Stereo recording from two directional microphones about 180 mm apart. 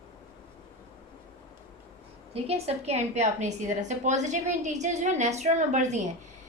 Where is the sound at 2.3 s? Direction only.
35° right (ahead or behind).